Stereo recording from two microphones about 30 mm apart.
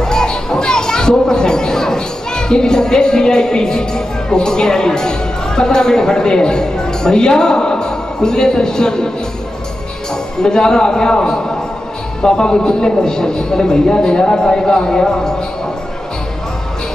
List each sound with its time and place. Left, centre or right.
0.0 s a man's voice: centre
10.4 s a man's voice: left